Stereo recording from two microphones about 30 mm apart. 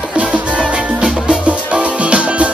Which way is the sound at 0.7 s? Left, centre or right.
Right.